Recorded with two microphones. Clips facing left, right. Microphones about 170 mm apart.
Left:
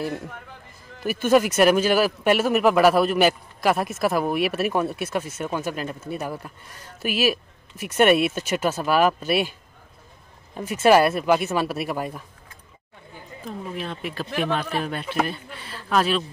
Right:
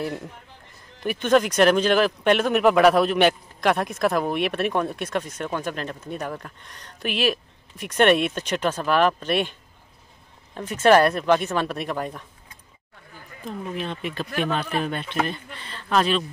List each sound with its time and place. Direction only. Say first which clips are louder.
0.0 s speech: left 1 dB; centre (ahead or behind)
13.1 s chatter: left 4 dB; 20° left (ahead or behind)
13.4 s speech: right 1 dB; centre (ahead or behind)